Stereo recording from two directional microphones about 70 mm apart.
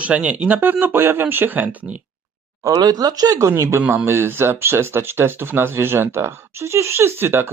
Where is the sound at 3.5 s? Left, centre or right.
Right.